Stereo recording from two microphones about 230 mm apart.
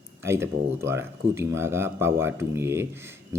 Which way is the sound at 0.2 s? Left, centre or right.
Centre.